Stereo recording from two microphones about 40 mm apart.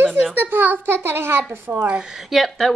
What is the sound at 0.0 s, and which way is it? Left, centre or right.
A child's voice, right.